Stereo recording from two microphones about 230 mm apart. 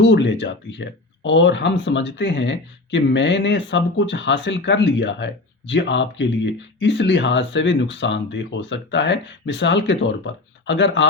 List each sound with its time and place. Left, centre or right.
0.0 s speech: left